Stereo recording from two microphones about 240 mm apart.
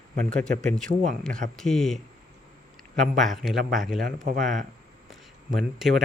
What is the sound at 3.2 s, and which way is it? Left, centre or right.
Speech, centre.